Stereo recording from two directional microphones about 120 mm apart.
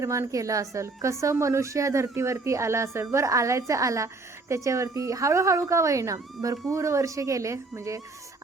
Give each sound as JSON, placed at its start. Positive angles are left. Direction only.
{"t": 0.0, "sound": "a woman's voice", "side_deg": -25}